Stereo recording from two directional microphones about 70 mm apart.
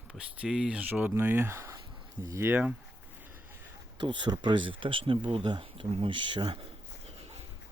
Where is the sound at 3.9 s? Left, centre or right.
Right.